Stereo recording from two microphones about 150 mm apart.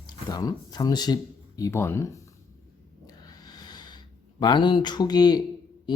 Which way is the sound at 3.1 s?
25° left (ahead or behind).